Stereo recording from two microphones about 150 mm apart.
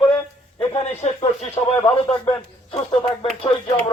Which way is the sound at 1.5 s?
40° left (ahead or behind).